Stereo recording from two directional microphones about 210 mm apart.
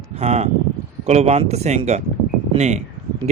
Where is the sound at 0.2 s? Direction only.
30° right (ahead or behind).